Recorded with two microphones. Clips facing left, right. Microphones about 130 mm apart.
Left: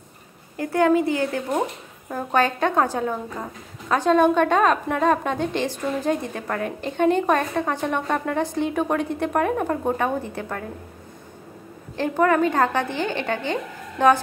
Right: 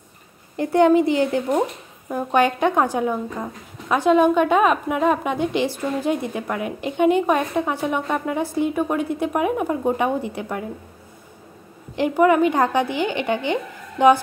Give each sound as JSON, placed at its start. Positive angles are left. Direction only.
{"t": 0.6, "sound": "a woman's voice", "side_deg": -20}
{"t": 11.9, "sound": "a woman's voice", "side_deg": -15}